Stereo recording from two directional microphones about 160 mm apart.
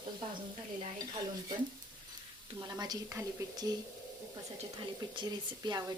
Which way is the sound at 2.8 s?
20° right (ahead or behind).